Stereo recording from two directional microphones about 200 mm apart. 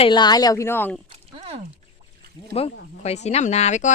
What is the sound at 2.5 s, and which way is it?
Speech, 30° left (ahead or behind).